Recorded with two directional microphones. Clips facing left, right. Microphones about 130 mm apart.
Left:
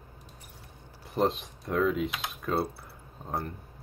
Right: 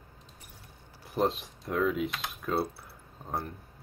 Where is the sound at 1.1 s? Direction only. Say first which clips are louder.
Left 1 dB; centre (ahead or behind).